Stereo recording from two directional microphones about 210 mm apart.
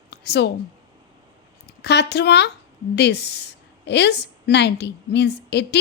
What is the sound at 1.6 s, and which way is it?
A woman's voice, 55° left (ahead or behind).